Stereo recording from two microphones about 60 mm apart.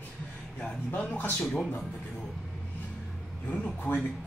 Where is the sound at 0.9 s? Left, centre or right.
Left.